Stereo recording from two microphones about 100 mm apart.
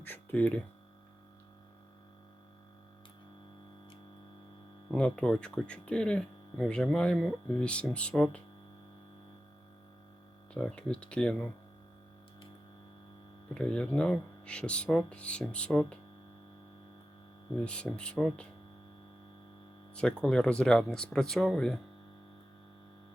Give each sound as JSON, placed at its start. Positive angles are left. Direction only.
{"t": 0.0, "sound": "speech", "side_deg": 20}
{"t": 4.9, "sound": "speech", "side_deg": 10}
{"t": 7.2, "sound": "speech", "side_deg": 0}
{"t": 7.6, "sound": "speech", "side_deg": 10}
{"t": 10.5, "sound": "speech", "side_deg": 10}
{"t": 13.5, "sound": "speech", "side_deg": 10}
{"t": 17.6, "sound": "speech", "side_deg": 10}
{"t": 20.0, "sound": "speech", "side_deg": 10}